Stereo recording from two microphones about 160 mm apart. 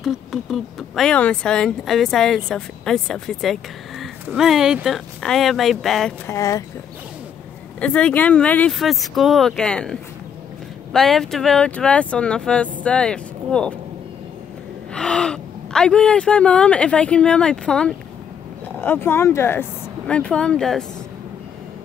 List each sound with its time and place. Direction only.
0.0 s speech: centre (ahead or behind)
6.2 s speech: 20° left (ahead or behind)
7.8 s speech: 10° left (ahead or behind)
15.0 s speech: 5° left (ahead or behind)